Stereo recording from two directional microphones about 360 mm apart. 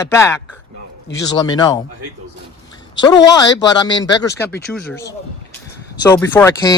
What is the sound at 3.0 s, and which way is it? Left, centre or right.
Speech, centre.